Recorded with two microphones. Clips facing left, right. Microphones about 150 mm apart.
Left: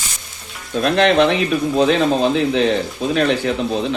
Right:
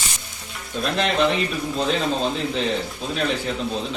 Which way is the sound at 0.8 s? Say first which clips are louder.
Left 7 dB; 70° left (ahead or behind).